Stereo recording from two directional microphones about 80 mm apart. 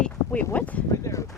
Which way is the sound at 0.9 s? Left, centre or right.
Left.